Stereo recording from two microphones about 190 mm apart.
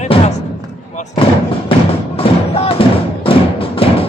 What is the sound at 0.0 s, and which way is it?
Slam, 35° left (ahead or behind).